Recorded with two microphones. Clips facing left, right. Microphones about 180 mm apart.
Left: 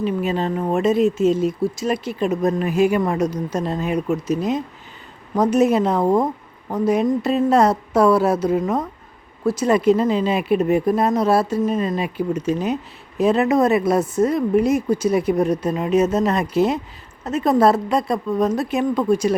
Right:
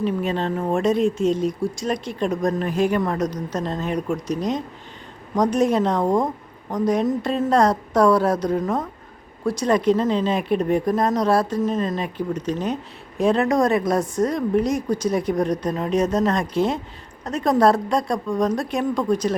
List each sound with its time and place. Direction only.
0.0 s speech: 5° left (ahead or behind)